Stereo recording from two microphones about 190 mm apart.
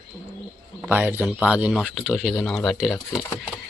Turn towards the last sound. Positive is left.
turn(degrees=0)  # may be behind; listen again after turning